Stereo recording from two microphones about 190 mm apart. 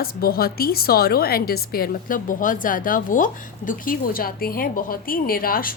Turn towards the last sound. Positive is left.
turn(degrees=50)  # may be behind; listen again after turning